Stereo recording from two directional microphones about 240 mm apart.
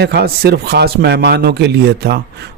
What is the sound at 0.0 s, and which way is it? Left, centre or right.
A man's voice, right.